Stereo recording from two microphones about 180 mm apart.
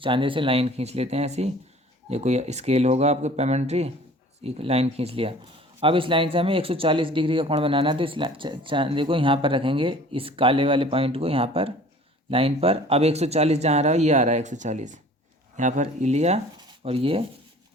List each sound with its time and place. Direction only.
0.0 s speech: 30° right (ahead or behind)